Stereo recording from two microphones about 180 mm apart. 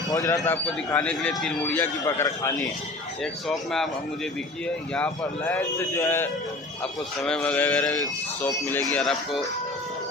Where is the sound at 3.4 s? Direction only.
Centre (ahead or behind).